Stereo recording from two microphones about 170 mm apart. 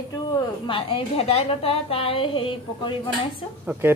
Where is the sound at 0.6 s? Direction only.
30° left (ahead or behind).